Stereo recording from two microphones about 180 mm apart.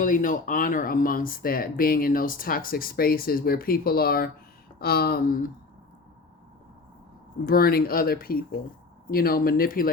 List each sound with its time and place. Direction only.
0.0 s speech: 45° left (ahead or behind)
7.4 s speech: 55° left (ahead or behind)